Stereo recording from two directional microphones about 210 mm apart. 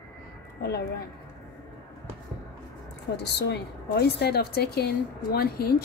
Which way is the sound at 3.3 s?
55° left (ahead or behind).